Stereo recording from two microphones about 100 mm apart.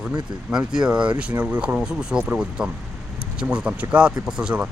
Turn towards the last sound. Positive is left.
turn(degrees=-10)  # may be behind; listen again after turning